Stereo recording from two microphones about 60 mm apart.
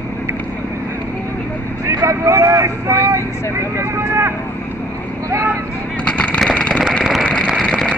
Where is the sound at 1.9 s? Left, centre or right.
Right.